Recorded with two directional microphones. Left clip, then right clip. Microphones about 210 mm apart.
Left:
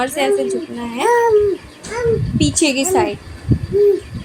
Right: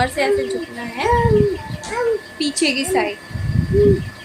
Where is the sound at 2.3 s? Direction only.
10° left (ahead or behind).